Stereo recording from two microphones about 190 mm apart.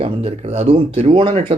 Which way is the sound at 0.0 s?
30° right (ahead or behind).